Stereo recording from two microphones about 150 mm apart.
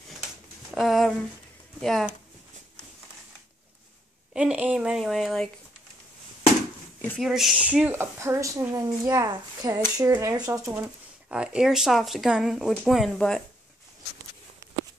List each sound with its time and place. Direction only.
0.7 s speech: centre (ahead or behind)
4.3 s speech: 5° right (ahead or behind)
7.2 s a woman's voice: centre (ahead or behind); by 10.9 s 20° right (ahead or behind)
11.2 s speech: 5° right (ahead or behind)